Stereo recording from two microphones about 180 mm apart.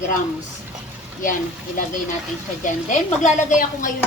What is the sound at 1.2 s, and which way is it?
Speech, 50° left (ahead or behind).